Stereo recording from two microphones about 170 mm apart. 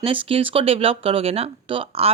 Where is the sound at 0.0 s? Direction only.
30° right (ahead or behind).